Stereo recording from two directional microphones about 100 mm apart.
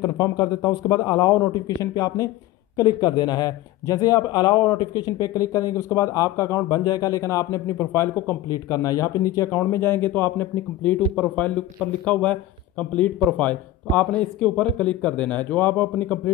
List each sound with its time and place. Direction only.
0.0 s speech: 40° left (ahead or behind)
8.6 s speech: 40° left (ahead or behind); by 16.2 s 20° left (ahead or behind)